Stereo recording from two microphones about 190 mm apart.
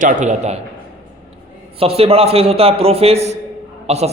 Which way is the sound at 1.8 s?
30° right (ahead or behind).